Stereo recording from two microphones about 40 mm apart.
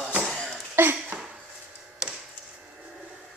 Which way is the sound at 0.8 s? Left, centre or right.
Right.